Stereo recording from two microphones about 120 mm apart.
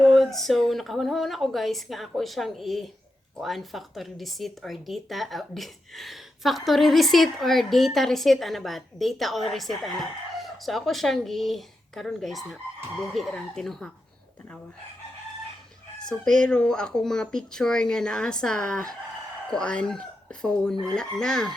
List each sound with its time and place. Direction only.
0.0 s speech: 5° left (ahead or behind)
16.4 s speech: 5° left (ahead or behind)